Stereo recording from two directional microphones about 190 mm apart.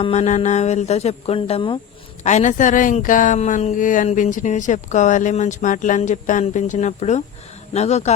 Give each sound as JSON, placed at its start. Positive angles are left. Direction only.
{"t": 0.0, "sound": "speech", "side_deg": 35}
{"t": 2.2, "sound": "speech", "side_deg": 40}